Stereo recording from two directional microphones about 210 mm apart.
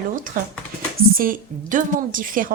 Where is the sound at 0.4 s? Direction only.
45° right (ahead or behind).